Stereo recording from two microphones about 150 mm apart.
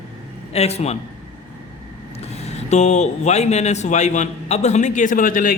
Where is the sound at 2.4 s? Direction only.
45° left (ahead or behind).